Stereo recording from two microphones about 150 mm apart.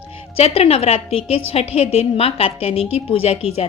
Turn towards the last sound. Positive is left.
turn(degrees=45)  # may be behind; listen again after turning